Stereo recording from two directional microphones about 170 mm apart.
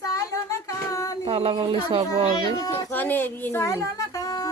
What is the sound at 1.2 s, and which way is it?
Speech, 35° right (ahead or behind).